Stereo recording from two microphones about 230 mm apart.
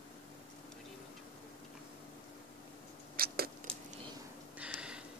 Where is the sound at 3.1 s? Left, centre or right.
Right.